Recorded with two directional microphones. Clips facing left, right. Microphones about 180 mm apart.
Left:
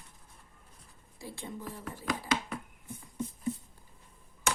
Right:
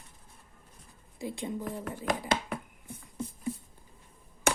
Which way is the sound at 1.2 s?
15° right (ahead or behind).